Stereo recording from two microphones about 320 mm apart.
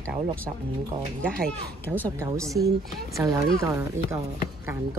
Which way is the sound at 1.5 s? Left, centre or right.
Centre.